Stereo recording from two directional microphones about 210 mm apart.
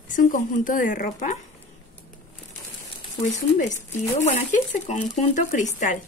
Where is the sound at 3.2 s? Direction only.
35° left (ahead or behind).